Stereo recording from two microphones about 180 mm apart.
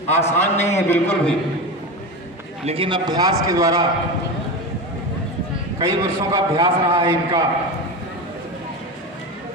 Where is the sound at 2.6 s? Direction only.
30° right (ahead or behind).